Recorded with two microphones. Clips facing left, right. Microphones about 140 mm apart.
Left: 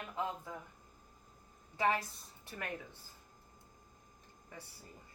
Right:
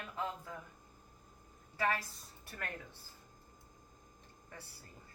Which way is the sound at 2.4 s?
15° left (ahead or behind).